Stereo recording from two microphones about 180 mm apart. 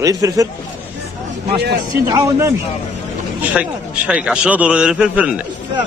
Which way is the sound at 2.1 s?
20° right (ahead or behind).